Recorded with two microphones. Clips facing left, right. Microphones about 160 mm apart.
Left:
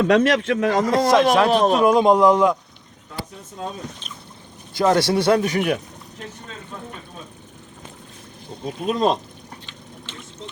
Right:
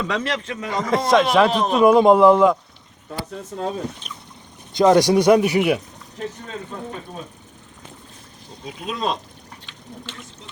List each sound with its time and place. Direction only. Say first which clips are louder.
0.0 s a man's voice: left 8 dB; 75° left (ahead or behind)
1.1 s speech: right 1 dB; centre (ahead or behind)
1.5 s a man's voice: left 3 dB; 60° left (ahead or behind)
1.8 s speech: right 6 dB; 5° right (ahead or behind)
4.7 s speech: right 4 dB; 20° right (ahead or behind)
8.6 s speech: left 6 dB; 45° left (ahead or behind)